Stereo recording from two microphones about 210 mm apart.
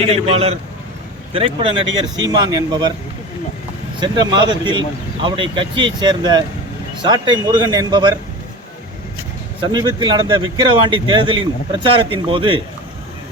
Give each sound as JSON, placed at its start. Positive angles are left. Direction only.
{"t": 0.3, "sound": "speech", "side_deg": -30}
{"t": 4.0, "sound": "speech", "side_deg": -20}
{"t": 9.6, "sound": "speech", "side_deg": -20}